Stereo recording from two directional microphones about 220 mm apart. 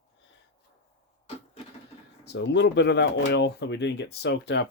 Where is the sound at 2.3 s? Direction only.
50° left (ahead or behind).